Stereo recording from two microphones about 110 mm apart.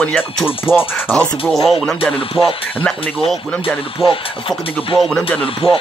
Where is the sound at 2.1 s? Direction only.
50° left (ahead or behind).